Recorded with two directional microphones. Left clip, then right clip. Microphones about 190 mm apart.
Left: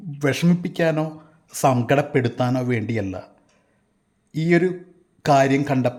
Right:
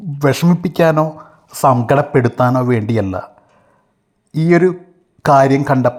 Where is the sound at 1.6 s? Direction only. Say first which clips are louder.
Right 7 dB; 5° left (ahead or behind).